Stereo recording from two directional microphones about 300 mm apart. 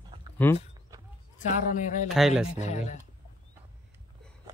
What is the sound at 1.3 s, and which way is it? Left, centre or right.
Speech, left.